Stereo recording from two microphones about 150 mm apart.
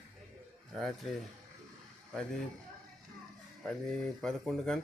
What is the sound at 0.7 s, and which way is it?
Speech, centre (ahead or behind).